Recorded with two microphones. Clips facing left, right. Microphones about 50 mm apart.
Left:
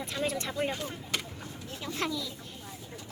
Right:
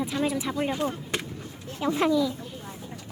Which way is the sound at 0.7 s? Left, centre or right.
Right.